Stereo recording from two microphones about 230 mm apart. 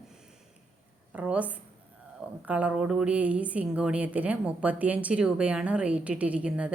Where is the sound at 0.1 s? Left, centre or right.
Centre.